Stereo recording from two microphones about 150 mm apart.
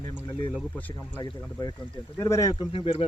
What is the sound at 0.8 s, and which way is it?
Speech, 10° left (ahead or behind).